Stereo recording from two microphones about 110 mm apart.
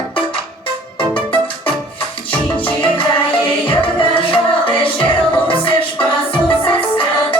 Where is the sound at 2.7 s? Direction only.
50° left (ahead or behind).